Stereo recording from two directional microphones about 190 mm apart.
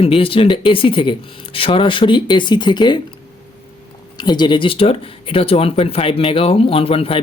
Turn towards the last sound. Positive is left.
turn(degrees=30)  # may be behind; listen again after turning